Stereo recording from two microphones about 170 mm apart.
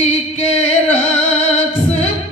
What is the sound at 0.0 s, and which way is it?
Music, 35° left (ahead or behind).